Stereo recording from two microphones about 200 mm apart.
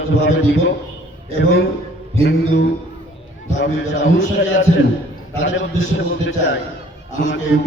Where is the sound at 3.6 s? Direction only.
65° left (ahead or behind).